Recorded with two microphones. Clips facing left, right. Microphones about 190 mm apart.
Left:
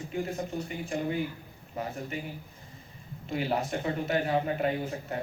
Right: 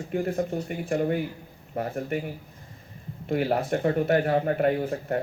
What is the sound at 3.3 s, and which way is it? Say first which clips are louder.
Speech: right 6 dB; 55° right (ahead or behind).